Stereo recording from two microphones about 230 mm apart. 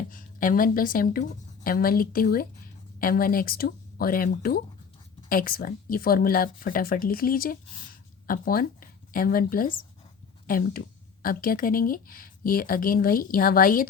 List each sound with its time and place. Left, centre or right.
0.1 s a woman's voice: left